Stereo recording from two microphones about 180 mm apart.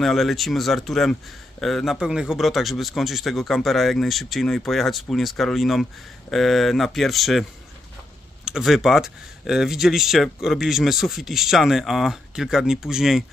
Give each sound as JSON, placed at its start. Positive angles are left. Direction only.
{"t": 0.0, "sound": "speech", "side_deg": 0}
{"t": 8.5, "sound": "speech", "side_deg": 0}